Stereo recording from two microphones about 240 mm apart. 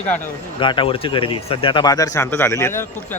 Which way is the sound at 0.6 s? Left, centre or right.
Left.